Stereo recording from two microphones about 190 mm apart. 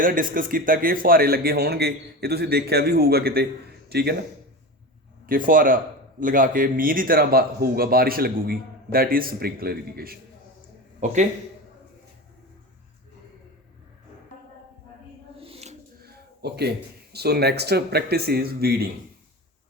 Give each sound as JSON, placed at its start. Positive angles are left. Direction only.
{"t": 0.0, "sound": "speech", "side_deg": -45}
{"t": 5.2, "sound": "speech", "side_deg": -45}
{"t": 11.0, "sound": "speech", "side_deg": -40}
{"t": 15.4, "sound": "a sound", "side_deg": -30}
{"t": 16.0, "sound": "speech", "side_deg": -55}